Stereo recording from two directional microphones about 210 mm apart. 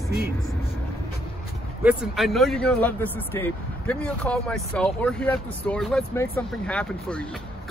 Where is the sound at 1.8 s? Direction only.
5° right (ahead or behind).